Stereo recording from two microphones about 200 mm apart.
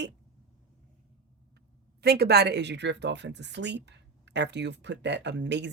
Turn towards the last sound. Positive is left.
turn(degrees=-60)  # may be behind; listen again after turning